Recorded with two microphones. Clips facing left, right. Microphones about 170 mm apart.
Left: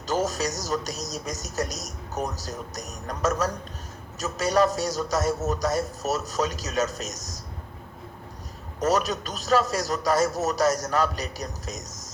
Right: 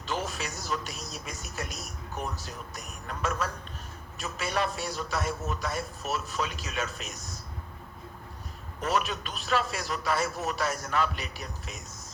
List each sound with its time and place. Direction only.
0.0 s speech: 40° left (ahead or behind)
8.8 s speech: 40° left (ahead or behind)